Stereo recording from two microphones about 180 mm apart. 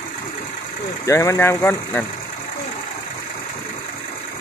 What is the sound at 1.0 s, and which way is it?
Speech, 15° left (ahead or behind).